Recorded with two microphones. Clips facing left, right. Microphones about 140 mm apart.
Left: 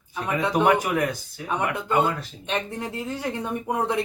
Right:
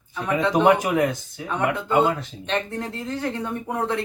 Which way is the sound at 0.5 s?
20° right (ahead or behind).